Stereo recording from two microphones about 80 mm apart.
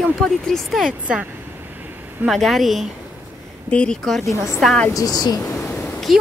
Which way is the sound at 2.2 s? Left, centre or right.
Centre.